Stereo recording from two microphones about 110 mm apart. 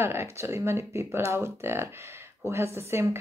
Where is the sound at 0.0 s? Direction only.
25° right (ahead or behind).